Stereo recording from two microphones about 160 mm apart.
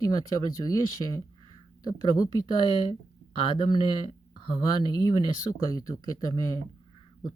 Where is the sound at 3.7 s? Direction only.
30° right (ahead or behind).